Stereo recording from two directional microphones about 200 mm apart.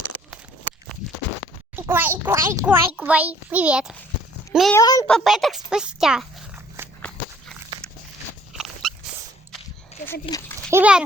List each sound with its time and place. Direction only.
1.7 s a child's voice: 10° right (ahead or behind)
4.7 s speech: 15° left (ahead or behind)
5.0 s speech: centre (ahead or behind)
6.8 s walk: 15° right (ahead or behind)
8.5 s dog: centre (ahead or behind)
10.3 s a child's voice: 25° left (ahead or behind)
10.7 s a child's voice: 10° right (ahead or behind)